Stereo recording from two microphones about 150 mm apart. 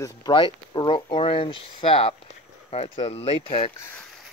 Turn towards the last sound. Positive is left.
turn(degrees=15)  # may be behind; listen again after turning